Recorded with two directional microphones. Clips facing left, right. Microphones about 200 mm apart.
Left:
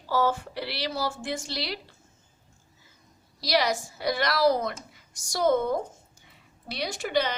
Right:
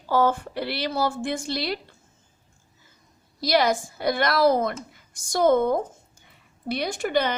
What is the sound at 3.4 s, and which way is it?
A woman's voice, 55° right (ahead or behind).